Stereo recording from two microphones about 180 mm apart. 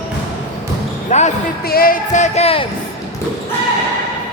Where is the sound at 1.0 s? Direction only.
40° left (ahead or behind).